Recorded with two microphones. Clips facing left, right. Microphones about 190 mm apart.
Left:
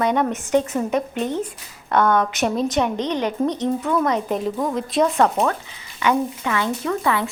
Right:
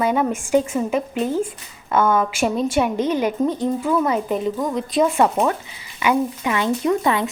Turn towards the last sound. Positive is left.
turn(degrees=-20)  # may be behind; listen again after turning